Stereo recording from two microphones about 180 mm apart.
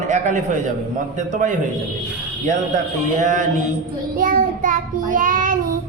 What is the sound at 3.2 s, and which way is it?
Child singing, 45° right (ahead or behind).